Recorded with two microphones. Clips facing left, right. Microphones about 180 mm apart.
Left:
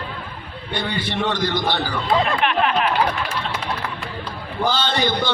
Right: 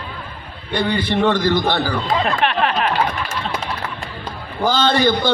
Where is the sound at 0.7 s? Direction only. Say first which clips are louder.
Right 6 dB; 50° right (ahead or behind).